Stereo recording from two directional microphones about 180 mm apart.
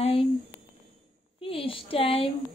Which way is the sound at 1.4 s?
30° left (ahead or behind).